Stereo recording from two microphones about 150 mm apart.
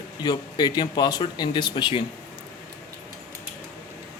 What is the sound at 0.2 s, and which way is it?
Speech, 30° left (ahead or behind).